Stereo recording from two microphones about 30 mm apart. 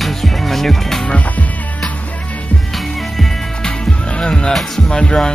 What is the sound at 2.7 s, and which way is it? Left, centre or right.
Music, centre.